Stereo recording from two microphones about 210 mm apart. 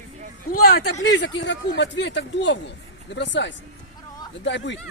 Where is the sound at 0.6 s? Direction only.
50° left (ahead or behind).